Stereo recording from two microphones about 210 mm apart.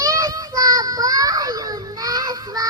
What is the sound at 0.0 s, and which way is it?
Child singing, 15° right (ahead or behind).